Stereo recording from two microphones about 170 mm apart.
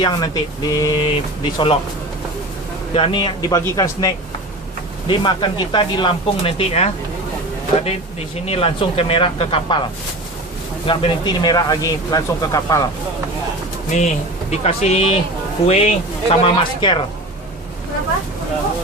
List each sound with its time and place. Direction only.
0.0 s speech: 25° left (ahead or behind)
2.9 s speech: 30° left (ahead or behind)
8.4 s speech: 35° left (ahead or behind)
13.9 s speech: 45° left (ahead or behind)